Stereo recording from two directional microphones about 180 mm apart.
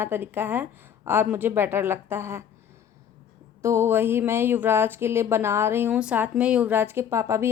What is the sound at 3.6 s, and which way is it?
A woman's voice, 15° right (ahead or behind).